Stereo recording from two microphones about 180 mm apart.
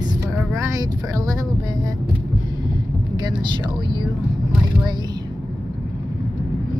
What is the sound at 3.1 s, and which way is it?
Speech, 25° right (ahead or behind).